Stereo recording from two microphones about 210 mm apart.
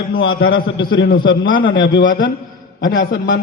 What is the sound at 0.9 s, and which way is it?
A man's voice, 50° left (ahead or behind).